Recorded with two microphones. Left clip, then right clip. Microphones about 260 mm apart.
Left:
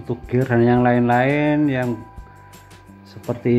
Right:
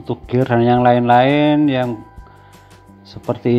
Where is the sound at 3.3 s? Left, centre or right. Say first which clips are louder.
Right 3 dB; centre.